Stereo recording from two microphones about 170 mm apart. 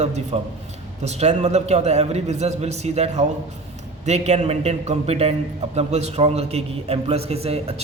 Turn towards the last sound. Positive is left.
turn(degrees=-35)  # may be behind; listen again after turning